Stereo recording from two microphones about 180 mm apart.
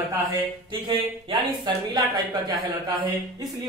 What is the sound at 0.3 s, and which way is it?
Speech, 30° right (ahead or behind).